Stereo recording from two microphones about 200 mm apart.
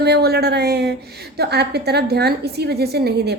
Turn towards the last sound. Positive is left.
turn(degrees=-55)  # may be behind; listen again after turning